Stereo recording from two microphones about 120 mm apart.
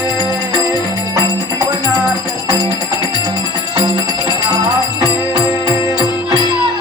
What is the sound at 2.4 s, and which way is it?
Music, 35° left (ahead or behind).